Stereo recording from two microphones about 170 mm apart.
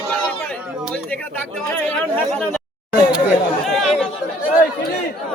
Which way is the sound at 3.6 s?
Centre (ahead or behind).